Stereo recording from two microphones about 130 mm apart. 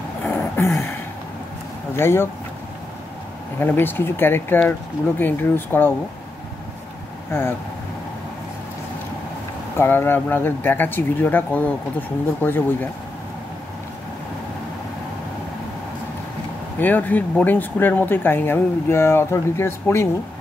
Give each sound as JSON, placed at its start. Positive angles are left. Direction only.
{"t": 0.2, "sound": "a sound", "side_deg": 10}
{"t": 2.0, "sound": "speech", "side_deg": 20}
{"t": 3.5, "sound": "speech", "side_deg": 15}
{"t": 7.2, "sound": "speech", "side_deg": 20}
{"t": 9.8, "sound": "speech", "side_deg": 15}
{"t": 16.8, "sound": "speech", "side_deg": 15}